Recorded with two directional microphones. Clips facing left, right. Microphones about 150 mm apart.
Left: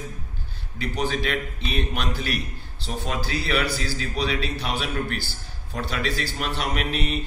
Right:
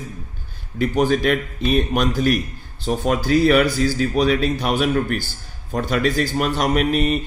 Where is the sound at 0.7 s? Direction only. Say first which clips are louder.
Right 9 dB; 50° right (ahead or behind).